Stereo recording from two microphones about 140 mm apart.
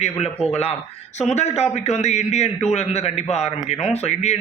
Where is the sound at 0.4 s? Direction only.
50° left (ahead or behind).